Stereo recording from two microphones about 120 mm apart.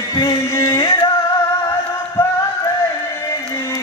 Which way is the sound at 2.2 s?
20° left (ahead or behind).